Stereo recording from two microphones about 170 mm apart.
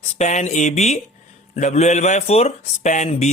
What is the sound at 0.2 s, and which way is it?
Speech, 45° left (ahead or behind).